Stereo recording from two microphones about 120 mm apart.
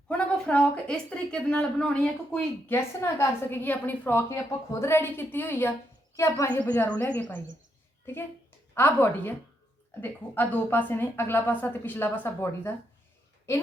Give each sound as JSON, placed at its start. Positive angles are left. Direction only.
{"t": 0.1, "sound": "a woman's voice", "side_deg": 10}
{"t": 2.6, "sound": "a woman's voice", "side_deg": 20}
{"t": 8.7, "sound": "a woman's voice", "side_deg": 20}